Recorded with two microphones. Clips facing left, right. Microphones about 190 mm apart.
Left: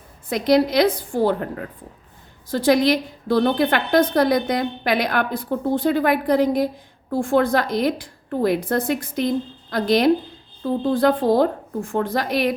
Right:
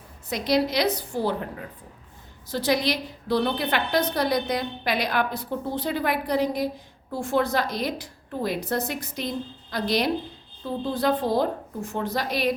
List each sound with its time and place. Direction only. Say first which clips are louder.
0.3 s a woman's voice: left 6 dB; 55° left (ahead or behind)